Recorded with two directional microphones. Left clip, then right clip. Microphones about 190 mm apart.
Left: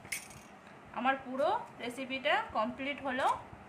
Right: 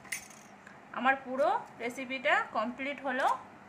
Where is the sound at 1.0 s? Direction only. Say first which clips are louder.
Right 3 dB; 30° right (ahead or behind).